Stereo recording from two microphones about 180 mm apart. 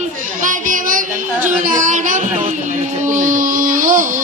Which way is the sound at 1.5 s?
45° right (ahead or behind).